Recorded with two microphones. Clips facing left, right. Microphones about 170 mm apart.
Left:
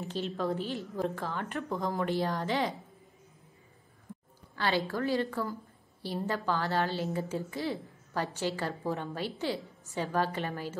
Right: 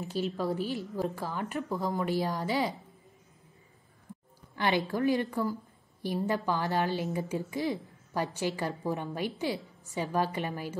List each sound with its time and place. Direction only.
0.0 s a woman's voice: 10° right (ahead or behind)
4.6 s a woman's voice: 15° right (ahead or behind)